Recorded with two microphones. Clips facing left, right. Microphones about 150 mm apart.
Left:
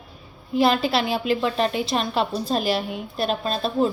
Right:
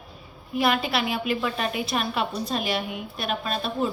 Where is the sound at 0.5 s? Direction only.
30° left (ahead or behind).